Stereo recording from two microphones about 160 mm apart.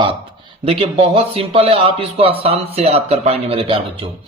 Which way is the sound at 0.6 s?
35° right (ahead or behind).